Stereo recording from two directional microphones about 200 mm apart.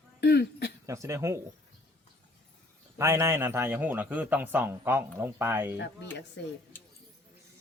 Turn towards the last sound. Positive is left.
turn(degrees=10)  # may be behind; listen again after turning